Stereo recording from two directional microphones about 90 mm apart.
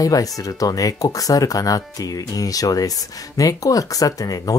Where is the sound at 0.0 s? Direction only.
40° left (ahead or behind).